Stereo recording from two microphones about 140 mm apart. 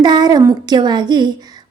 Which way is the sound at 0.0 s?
30° right (ahead or behind).